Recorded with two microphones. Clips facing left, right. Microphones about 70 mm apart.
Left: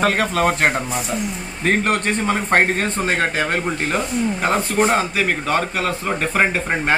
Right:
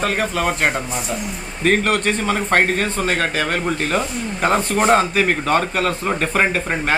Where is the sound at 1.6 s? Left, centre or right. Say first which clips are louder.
Right 2 dB; left.